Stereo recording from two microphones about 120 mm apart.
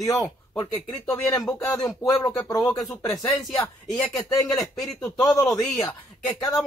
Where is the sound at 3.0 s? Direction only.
30° left (ahead or behind).